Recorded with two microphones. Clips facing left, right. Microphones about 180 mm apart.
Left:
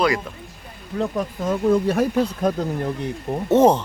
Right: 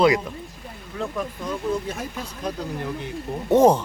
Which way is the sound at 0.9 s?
45° left (ahead or behind).